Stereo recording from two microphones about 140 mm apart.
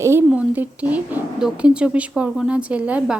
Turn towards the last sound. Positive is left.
turn(degrees=-10)  # may be behind; listen again after turning